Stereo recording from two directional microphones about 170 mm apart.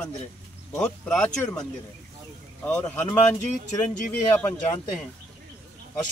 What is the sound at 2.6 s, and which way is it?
Speech, 10° left (ahead or behind).